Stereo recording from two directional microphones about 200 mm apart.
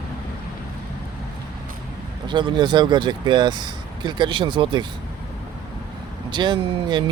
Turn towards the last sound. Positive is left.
turn(degrees=-20)  # may be behind; listen again after turning